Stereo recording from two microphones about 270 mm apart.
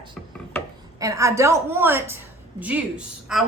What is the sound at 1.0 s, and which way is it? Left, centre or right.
A woman's voice, centre.